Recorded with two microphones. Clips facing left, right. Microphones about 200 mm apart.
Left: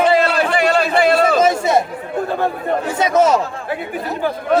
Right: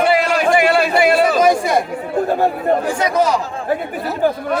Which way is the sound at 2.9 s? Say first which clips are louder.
Left 2 dB; 25° left (ahead or behind).